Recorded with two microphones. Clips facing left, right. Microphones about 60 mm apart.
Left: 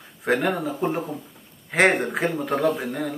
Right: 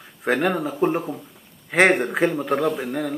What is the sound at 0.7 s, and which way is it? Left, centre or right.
Speech, right.